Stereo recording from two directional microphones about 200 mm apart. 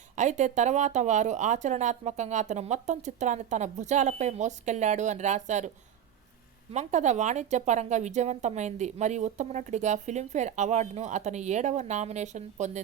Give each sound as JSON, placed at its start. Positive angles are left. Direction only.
{"t": 0.2, "sound": "speech", "side_deg": -35}